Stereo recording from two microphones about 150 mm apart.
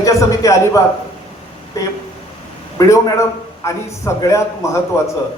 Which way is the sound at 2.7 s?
20° left (ahead or behind).